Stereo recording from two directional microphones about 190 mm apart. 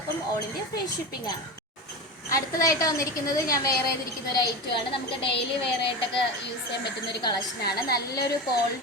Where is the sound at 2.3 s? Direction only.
15° left (ahead or behind).